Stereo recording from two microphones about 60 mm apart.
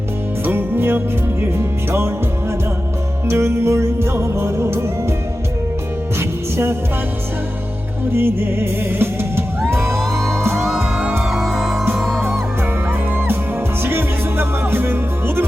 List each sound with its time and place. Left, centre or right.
0.4 s music: right
6.1 s music: right
8.1 s music: right
10.0 s music: centre
12.9 s music: right